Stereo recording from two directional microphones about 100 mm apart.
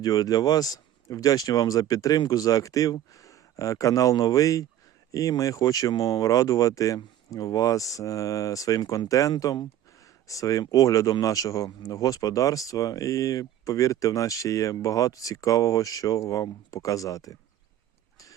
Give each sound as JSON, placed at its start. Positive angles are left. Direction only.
{"t": 0.0, "sound": "speech", "side_deg": 40}